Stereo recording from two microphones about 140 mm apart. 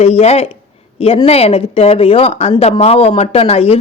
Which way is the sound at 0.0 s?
50° left (ahead or behind).